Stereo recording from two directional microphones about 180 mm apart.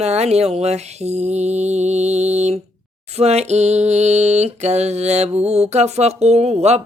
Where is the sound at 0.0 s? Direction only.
35° right (ahead or behind).